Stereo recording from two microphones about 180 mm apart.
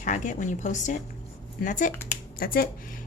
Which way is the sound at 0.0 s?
45° left (ahead or behind).